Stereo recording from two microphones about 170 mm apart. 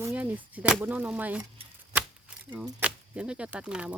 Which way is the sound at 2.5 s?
5° right (ahead or behind).